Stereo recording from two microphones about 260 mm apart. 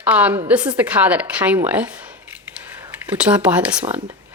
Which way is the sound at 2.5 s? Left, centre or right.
Centre.